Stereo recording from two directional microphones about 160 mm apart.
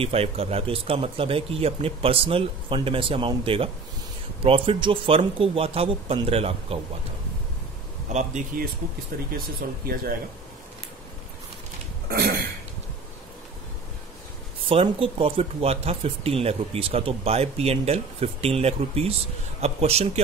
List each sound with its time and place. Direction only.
0.0 s speech: 40° right (ahead or behind)
8.1 s speech: 50° right (ahead or behind)
9.6 s speech: 70° right (ahead or behind)
14.7 s speech: 35° right (ahead or behind)